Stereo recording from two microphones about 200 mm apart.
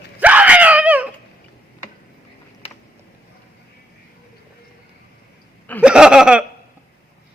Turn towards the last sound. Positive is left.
turn(degrees=-5)  # may be behind; listen again after turning